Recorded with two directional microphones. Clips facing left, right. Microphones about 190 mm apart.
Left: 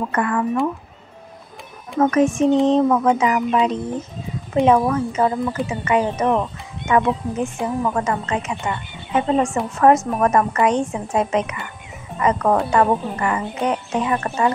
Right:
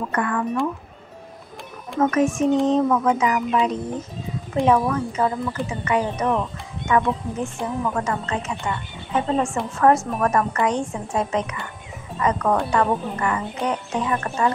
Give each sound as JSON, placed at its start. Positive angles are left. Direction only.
{"t": 0.1, "sound": "speech", "side_deg": 25}
{"t": 2.0, "sound": "speech", "side_deg": 30}